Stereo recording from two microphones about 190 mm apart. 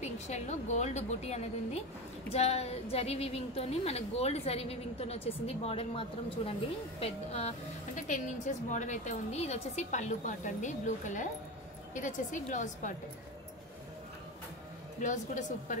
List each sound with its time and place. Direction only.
0.0 s a woman's voice: 35° left (ahead or behind)
7.9 s a woman's voice: 40° left (ahead or behind)
15.0 s a woman's voice: 40° left (ahead or behind)